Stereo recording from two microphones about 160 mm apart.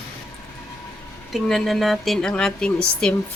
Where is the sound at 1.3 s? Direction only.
Centre (ahead or behind).